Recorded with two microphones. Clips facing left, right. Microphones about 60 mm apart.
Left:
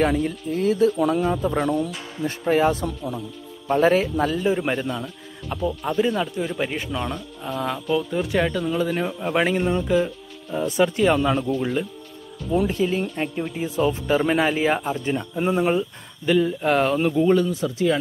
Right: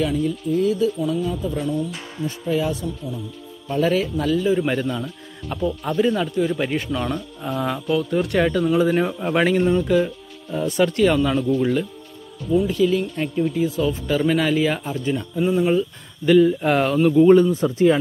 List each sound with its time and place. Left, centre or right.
0.0 s speech: left
0.9 s speech: left
3.6 s a man's voice: left
4.6 s a man's voice: centre
12.6 s a man's voice: left
16.3 s speech: centre
17.4 s speech: right